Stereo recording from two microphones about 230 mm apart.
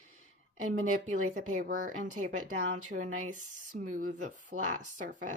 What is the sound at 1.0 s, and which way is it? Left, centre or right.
Speech, right.